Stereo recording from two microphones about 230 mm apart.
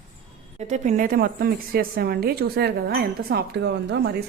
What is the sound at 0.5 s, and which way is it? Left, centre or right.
A woman's voice, right.